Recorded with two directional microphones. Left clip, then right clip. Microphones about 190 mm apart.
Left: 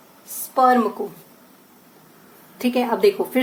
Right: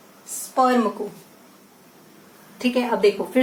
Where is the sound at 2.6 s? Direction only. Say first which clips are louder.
Left 1 dB; 40° left (ahead or behind).